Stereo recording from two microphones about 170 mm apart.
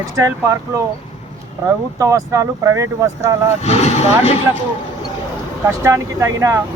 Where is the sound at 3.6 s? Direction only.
40° left (ahead or behind).